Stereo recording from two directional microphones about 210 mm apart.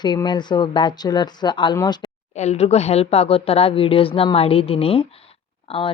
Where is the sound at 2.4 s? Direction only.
30° left (ahead or behind).